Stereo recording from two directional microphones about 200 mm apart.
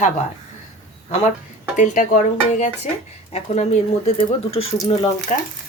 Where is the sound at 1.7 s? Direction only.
40° left (ahead or behind).